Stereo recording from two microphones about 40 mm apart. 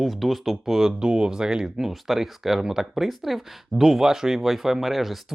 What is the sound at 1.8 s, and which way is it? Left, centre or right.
Speech, centre.